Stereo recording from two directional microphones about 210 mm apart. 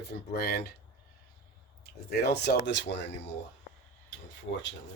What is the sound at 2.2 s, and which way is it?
Speech, 50° left (ahead or behind).